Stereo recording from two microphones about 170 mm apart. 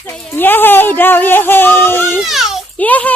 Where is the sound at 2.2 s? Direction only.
Centre (ahead or behind).